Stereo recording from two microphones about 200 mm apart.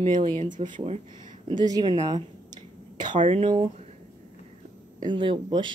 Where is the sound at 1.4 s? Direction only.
20° right (ahead or behind).